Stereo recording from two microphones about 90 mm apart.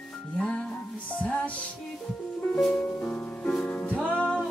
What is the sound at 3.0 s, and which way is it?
Music, 15° left (ahead or behind).